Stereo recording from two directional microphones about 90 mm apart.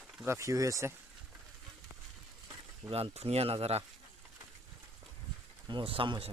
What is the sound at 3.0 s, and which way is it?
Speech, 90° right.